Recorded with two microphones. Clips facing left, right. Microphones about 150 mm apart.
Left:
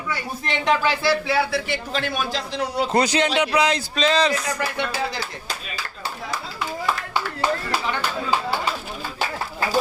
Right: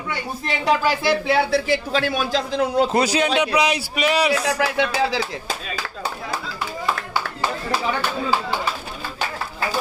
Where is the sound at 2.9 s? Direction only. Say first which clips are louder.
Right 1 dB; 10° right (ahead or behind).